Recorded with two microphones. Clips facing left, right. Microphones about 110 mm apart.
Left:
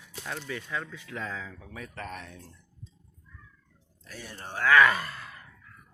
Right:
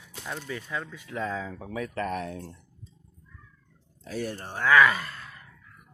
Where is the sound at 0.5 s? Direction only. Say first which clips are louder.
Even; 15° right (ahead or behind).